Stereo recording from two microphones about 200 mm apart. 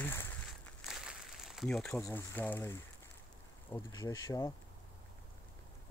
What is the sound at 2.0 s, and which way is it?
Speech, 10° left (ahead or behind).